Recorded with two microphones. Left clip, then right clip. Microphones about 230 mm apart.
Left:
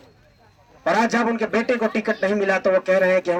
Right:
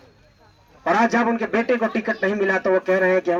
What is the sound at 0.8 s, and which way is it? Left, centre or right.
A man's voice, left.